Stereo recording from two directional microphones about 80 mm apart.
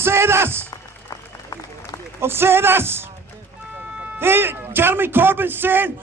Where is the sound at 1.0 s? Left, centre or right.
Left.